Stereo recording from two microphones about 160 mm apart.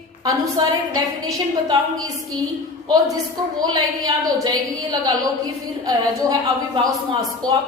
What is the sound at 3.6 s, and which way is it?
A woman's voice, 20° right (ahead or behind).